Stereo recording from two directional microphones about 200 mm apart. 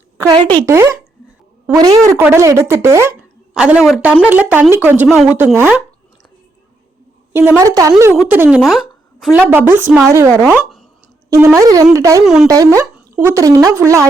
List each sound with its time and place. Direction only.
0.2 s a woman's voice: 20° right (ahead or behind)
7.3 s speech: 10° right (ahead or behind)
8.2 s a woman's voice: 5° right (ahead or behind)
9.5 s speech: 10° right (ahead or behind)
12.2 s a woman's voice: 5° right (ahead or behind)
12.5 s speech: 15° right (ahead or behind)